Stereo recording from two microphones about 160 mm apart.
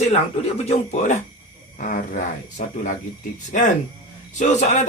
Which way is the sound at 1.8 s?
55° left (ahead or behind).